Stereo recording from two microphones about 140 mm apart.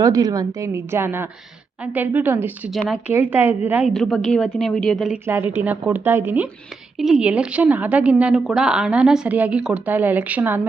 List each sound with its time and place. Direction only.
0.0 s a woman's voice: 25° right (ahead or behind)
2.7 s speech: centre (ahead or behind)
3.1 s a woman's voice: 15° right (ahead or behind)
3.9 s speech: 5° left (ahead or behind)
5.2 s a woman's voice: 15° right (ahead or behind)